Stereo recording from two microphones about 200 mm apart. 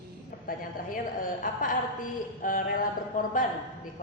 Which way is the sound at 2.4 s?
40° left (ahead or behind).